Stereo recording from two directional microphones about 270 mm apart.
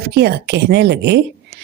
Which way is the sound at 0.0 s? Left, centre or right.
Right.